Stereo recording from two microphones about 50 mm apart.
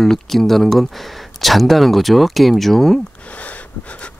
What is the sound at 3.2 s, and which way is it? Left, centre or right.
Wheeze, left.